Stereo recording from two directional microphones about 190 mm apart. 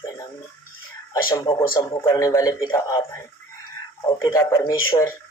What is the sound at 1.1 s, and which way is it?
A man's voice, 20° left (ahead or behind).